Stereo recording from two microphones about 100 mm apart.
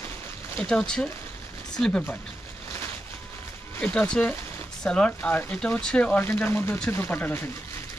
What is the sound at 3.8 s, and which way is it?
Speech, 10° left (ahead or behind).